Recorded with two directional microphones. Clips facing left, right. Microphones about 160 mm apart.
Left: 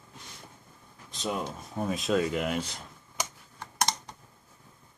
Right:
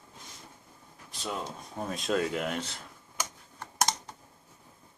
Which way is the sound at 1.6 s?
Centre (ahead or behind).